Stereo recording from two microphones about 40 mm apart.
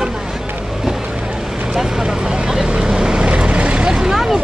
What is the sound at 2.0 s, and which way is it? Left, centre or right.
Vehicle, right.